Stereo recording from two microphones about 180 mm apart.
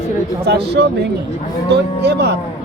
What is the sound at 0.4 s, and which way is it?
Speech, 65° right (ahead or behind).